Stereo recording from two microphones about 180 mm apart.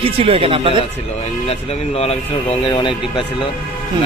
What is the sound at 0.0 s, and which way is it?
Speech, 30° right (ahead or behind).